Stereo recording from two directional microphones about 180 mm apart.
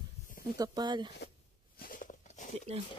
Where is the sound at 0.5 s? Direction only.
20° right (ahead or behind).